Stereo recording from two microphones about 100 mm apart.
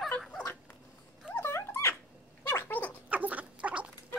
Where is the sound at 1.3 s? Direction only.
25° left (ahead or behind).